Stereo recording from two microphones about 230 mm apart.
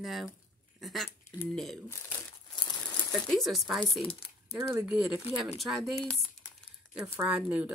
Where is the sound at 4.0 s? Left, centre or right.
Left.